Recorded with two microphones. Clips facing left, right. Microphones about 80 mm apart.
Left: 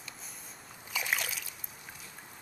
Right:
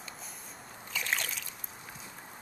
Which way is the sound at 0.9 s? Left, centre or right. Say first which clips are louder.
Left 1 dB; centre.